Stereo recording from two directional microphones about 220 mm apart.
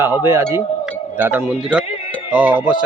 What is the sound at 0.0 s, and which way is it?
Speech, 10° right (ahead or behind).